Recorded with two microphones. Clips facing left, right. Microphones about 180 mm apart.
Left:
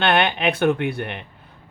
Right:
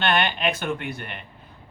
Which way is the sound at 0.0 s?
60° left (ahead or behind).